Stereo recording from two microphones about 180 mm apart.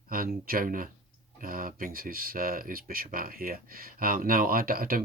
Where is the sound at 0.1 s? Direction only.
50° right (ahead or behind).